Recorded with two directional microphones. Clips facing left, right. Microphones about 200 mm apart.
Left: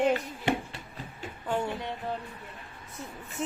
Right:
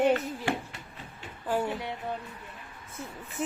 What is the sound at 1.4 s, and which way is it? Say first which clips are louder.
Speech: right 1 dB; 5° right (ahead or behind).